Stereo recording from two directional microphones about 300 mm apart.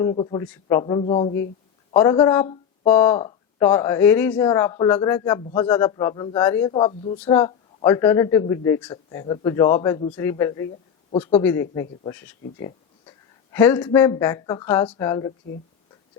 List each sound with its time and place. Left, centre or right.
0.0 s speech: centre